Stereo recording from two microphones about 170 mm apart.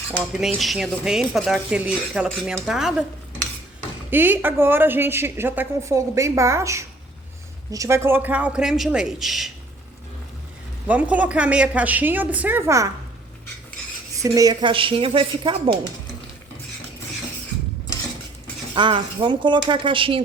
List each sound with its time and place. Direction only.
0.5 s speech: centre (ahead or behind)
4.1 s a woman's voice: 10° right (ahead or behind)
10.8 s a woman's voice: 10° right (ahead or behind)
14.2 s speech: 20° right (ahead or behind)
18.7 s speech: 30° right (ahead or behind)